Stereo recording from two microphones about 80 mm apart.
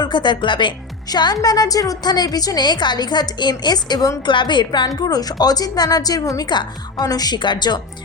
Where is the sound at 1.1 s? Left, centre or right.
Left.